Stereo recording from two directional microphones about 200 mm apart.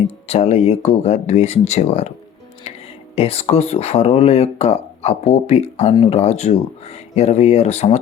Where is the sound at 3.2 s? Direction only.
30° left (ahead or behind).